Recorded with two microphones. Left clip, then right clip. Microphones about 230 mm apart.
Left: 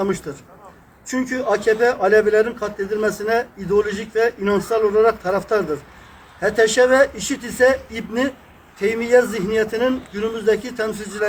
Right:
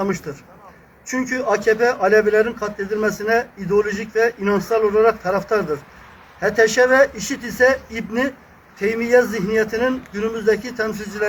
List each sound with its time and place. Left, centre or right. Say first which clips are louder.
0.0 s a man's voice: left 1 dB; centre